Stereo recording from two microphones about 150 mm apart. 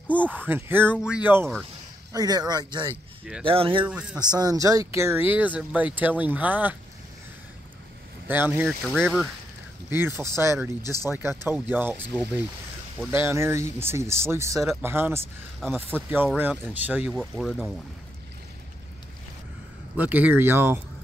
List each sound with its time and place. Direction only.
0.3 s speech: 15° right (ahead or behind)
2.1 s speech: 25° right (ahead or behind)
3.8 s speech: 5° right (ahead or behind)
4.2 s speech: 25° right (ahead or behind); by 6.8 s 10° right (ahead or behind)
8.3 s speech: 10° right (ahead or behind)
8.6 s speech: centre (ahead or behind)
9.8 s speech: 15° right (ahead or behind)
17.2 s speech: centre (ahead or behind)
20.0 s speech: 10° right (ahead or behind)